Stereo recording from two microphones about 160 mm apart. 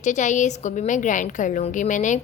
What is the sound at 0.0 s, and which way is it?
A woman's voice, 50° left (ahead or behind).